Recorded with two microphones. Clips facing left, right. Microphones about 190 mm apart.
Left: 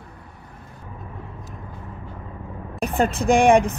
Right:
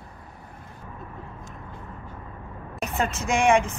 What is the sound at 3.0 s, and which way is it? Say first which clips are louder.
Speech: left 7 dB; 35° left (ahead or behind).